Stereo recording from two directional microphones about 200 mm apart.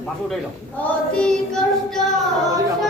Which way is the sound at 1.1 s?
5° left (ahead or behind).